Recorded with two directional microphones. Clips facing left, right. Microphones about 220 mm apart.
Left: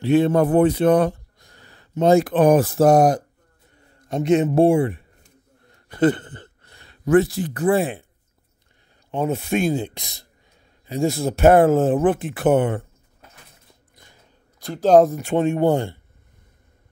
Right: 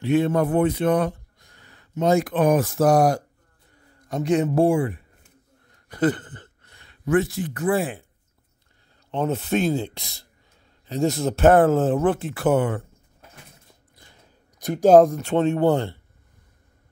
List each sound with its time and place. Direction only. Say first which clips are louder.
0.0 s speech: left 3 dB; 30° left (ahead or behind)
9.1 s speech: left 1 dB; 10° left (ahead or behind)
14.6 s speech: right 4 dB; 20° right (ahead or behind)
14.9 s speech: even; centre (ahead or behind)
15.1 s speech: left 1 dB; 10° left (ahead or behind)